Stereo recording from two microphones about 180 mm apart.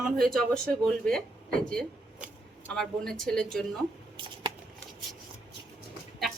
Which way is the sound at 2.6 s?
5° left (ahead or behind).